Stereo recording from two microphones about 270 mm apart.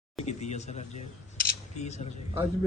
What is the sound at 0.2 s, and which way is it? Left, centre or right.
Speech, left.